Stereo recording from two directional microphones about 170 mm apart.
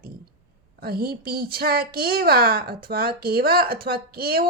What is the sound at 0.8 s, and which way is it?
A woman's voice, 65° right (ahead or behind).